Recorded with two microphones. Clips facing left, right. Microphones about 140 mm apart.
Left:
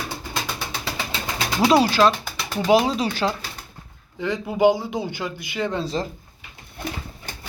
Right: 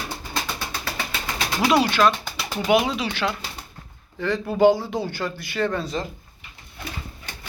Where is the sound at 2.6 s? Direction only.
35° left (ahead or behind).